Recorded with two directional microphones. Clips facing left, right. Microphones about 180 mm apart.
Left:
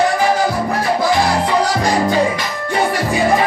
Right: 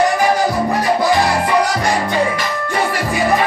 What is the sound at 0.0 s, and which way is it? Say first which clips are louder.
Music: right 1 dB; 10° right (ahead or behind).